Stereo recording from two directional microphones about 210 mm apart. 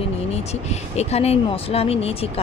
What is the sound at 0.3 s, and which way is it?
A woman's voice, 30° left (ahead or behind).